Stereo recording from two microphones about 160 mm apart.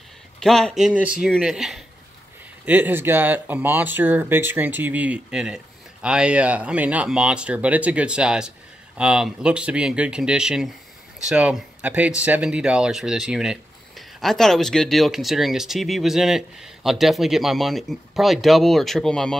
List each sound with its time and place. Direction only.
0.4 s speech: 5° left (ahead or behind)